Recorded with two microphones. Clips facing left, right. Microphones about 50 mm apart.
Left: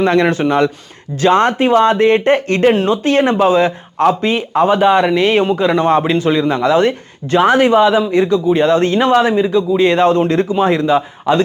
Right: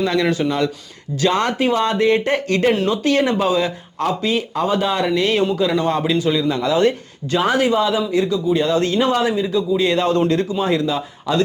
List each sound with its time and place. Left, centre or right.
0.0 s speech: left